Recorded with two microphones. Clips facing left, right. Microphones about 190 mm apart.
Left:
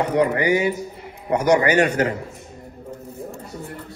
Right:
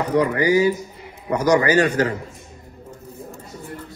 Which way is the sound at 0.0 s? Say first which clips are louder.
Even; 30° left (ahead or behind).